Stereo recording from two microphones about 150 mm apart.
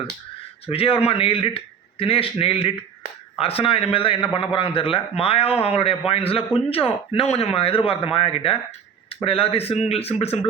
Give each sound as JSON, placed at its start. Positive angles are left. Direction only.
{"t": 0.7, "sound": "speech", "side_deg": 40}